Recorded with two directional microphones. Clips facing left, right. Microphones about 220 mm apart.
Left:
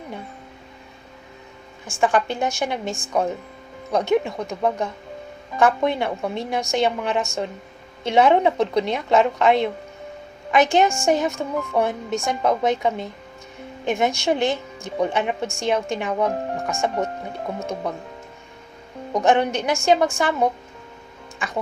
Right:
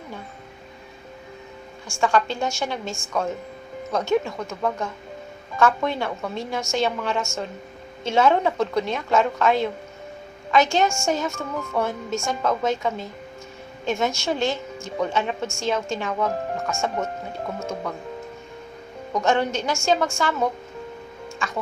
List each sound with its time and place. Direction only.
1.9 s a woman's voice: 20° left (ahead or behind)
19.1 s a woman's voice: 15° left (ahead or behind)
21.3 s speech: 15° left (ahead or behind)